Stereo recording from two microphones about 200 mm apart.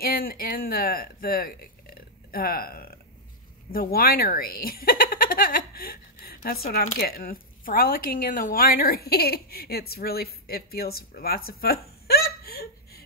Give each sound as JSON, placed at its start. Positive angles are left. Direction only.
{"t": 0.0, "sound": "speech", "side_deg": 45}